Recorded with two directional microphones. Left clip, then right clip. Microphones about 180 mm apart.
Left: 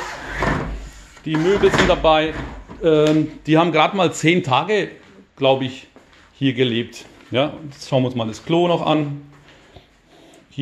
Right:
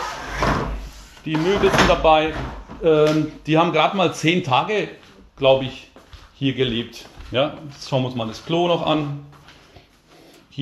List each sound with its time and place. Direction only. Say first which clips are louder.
1.2 s speech: left 2 dB; 25° left (ahead or behind)